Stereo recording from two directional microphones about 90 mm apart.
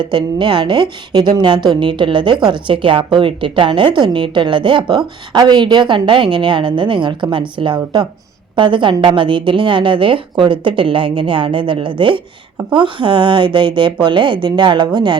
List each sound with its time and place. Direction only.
0.0 s a woman's voice: 65° right (ahead or behind)